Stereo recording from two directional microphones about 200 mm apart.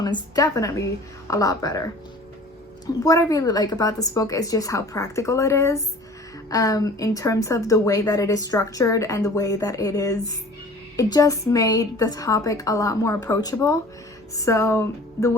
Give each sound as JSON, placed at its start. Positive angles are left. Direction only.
{"t": 0.0, "sound": "a woman's voice", "side_deg": 20}
{"t": 2.8, "sound": "a woman's voice", "side_deg": 15}